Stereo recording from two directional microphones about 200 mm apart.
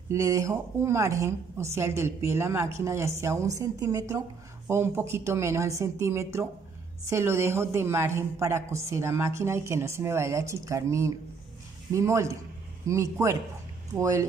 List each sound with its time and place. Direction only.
0.1 s a woman's voice: 15° right (ahead or behind)